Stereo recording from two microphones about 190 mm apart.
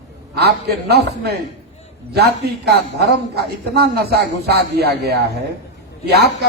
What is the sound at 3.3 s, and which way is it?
A man's voice, 55° right (ahead or behind).